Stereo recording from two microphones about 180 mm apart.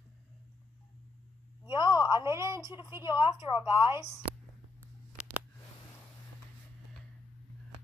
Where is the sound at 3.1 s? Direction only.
25° left (ahead or behind).